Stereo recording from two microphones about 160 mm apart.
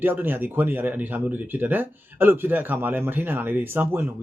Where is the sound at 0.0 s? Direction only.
10° right (ahead or behind).